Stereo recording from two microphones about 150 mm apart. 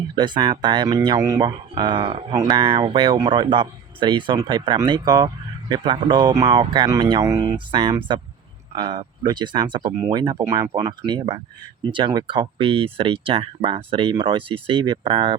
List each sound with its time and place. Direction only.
0.2 s speech: 30° right (ahead or behind)
2.3 s speech: 20° right (ahead or behind)
2.6 s speech: 35° right (ahead or behind)